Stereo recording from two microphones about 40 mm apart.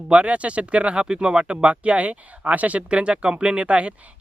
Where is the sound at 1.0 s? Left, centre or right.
Centre.